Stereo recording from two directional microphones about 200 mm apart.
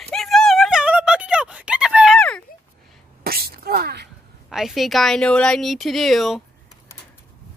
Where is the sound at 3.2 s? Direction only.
50° right (ahead or behind).